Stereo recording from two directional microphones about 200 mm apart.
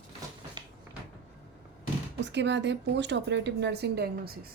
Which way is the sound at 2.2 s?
60° right (ahead or behind).